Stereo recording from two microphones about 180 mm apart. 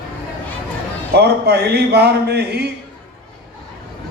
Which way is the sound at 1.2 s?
65° right (ahead or behind).